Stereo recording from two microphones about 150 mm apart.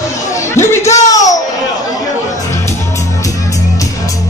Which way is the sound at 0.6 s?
20° left (ahead or behind).